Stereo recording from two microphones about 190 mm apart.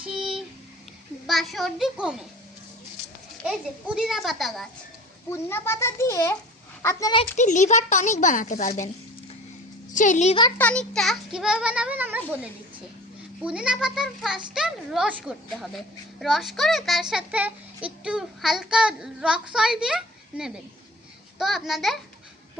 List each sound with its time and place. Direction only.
0.1 s a sound: centre (ahead or behind)
1.3 s a child's voice: centre (ahead or behind)
3.4 s a child's voice: 5° right (ahead or behind)
5.3 s a child's voice: 15° left (ahead or behind)
7.3 s speech: 40° left (ahead or behind)
9.9 s a woman's voice: 40° left (ahead or behind)
10.6 s a child's voice: 5° left (ahead or behind); by 12.2 s 10° right (ahead or behind)
13.4 s a child's voice: 5° right (ahead or behind)